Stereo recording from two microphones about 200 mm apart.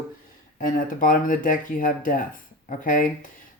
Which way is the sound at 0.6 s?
45° left (ahead or behind).